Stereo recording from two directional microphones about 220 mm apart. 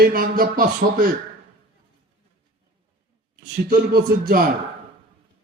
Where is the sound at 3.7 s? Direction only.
40° right (ahead or behind).